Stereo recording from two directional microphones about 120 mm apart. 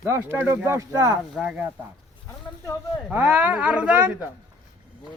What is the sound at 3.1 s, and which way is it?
Speech, 15° right (ahead or behind).